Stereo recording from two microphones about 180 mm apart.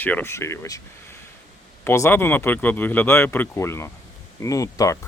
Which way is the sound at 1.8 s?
15° left (ahead or behind).